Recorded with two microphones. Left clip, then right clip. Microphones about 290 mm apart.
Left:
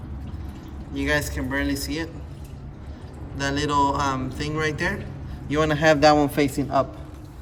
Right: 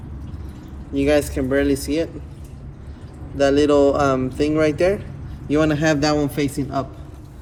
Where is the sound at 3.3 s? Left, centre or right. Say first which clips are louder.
Right 8 dB; left.